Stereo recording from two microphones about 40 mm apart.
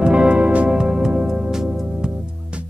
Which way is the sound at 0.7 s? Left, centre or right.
Centre.